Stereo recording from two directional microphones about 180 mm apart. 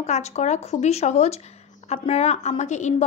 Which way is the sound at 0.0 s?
40° left (ahead or behind).